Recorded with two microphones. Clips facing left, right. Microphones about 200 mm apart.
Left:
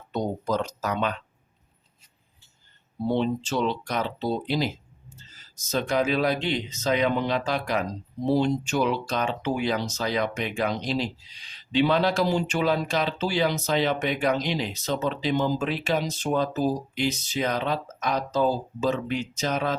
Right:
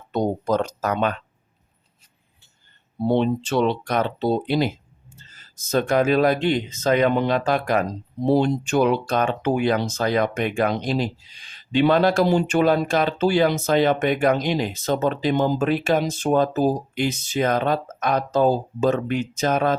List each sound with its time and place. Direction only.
0.1 s speech: 55° right (ahead or behind)
3.0 s speech: 60° right (ahead or behind)